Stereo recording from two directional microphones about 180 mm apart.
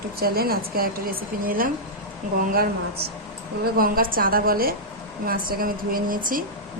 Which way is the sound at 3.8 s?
55° right (ahead or behind).